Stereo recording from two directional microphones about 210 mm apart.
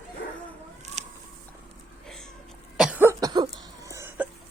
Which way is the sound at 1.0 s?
35° right (ahead or behind).